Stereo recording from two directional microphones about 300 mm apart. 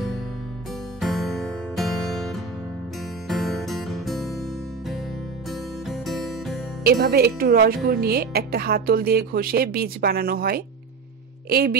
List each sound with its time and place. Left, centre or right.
1.0 s music: centre
3.3 s music: centre
5.9 s music: centre
6.8 s speech: right